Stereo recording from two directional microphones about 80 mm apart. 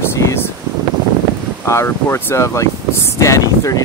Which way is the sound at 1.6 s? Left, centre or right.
Left.